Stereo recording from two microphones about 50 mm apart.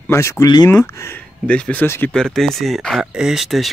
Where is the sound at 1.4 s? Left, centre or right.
Left.